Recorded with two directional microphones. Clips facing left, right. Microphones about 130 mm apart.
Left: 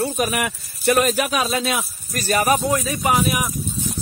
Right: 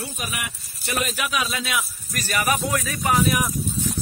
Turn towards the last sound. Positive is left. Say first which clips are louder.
# left 1 dB
turn(degrees=15)  # may be behind; listen again after turning